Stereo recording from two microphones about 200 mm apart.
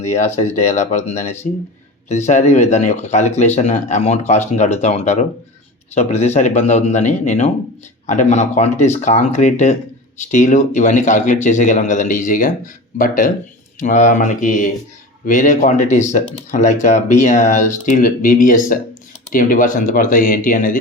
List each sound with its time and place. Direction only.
0.0 s speech: 35° left (ahead or behind)